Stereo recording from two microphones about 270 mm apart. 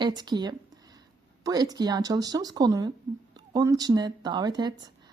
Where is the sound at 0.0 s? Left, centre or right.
Centre.